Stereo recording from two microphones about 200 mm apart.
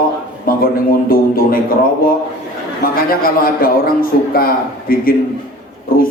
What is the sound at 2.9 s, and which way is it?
A man's voice, 45° left (ahead or behind).